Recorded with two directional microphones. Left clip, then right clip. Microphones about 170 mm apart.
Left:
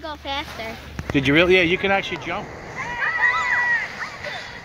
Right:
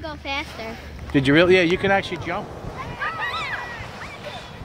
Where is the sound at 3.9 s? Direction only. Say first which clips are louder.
Left 4 dB; 25° right (ahead or behind).